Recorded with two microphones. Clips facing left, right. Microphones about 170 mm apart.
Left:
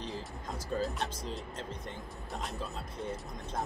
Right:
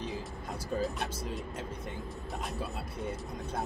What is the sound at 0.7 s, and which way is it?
Speech, centre (ahead or behind).